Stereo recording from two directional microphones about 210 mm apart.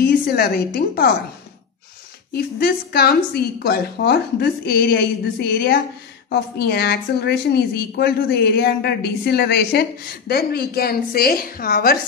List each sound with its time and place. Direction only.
0.0 s a woman's voice: 45° left (ahead or behind)
2.3 s a woman's voice: 50° left (ahead or behind)